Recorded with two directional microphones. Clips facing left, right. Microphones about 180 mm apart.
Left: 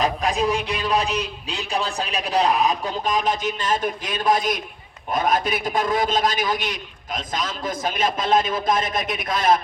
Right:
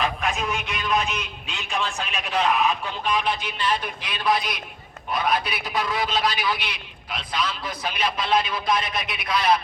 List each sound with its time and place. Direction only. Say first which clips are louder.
0.0 s a man's voice: left 5 dB; 35° left (ahead or behind)